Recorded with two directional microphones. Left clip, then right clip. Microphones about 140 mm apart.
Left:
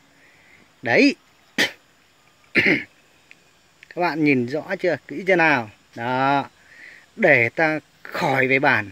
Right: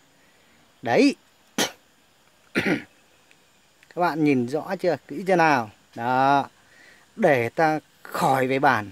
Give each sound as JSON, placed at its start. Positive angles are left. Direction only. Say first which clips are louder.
{"t": 0.8, "sound": "dog", "louder": "left 3 dB", "side_deg": -30}
{"t": 2.5, "sound": "throat clearing", "louder": "left 7 dB", "side_deg": -20}
{"t": 3.9, "sound": "speech", "louder": "left 2 dB", "side_deg": -20}